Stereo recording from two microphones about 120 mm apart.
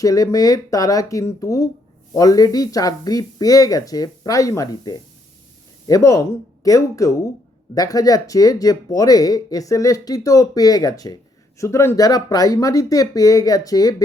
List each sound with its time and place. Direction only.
0.0 s speech: 30° left (ahead or behind)